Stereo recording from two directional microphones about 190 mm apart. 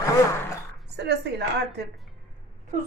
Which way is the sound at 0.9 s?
60° right (ahead or behind).